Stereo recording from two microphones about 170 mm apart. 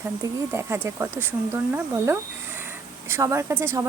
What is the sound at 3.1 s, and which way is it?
Speech, 15° right (ahead or behind).